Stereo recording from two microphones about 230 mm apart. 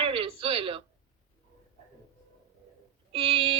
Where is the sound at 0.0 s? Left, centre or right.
Right.